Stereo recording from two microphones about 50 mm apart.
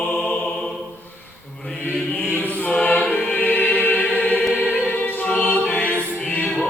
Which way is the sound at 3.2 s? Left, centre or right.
Left.